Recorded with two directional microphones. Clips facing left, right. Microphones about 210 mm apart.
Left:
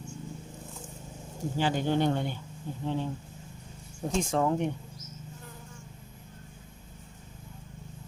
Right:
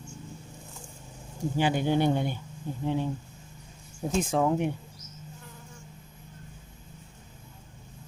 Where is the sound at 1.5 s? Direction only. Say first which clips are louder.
Right 2 dB; 10° right (ahead or behind).